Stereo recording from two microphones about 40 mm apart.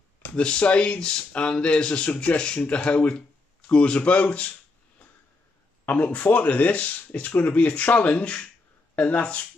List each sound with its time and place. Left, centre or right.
0.4 s speech: left
5.9 s speech: left